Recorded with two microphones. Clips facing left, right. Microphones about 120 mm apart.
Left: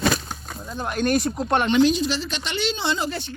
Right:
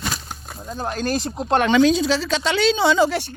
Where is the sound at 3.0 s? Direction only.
75° right (ahead or behind).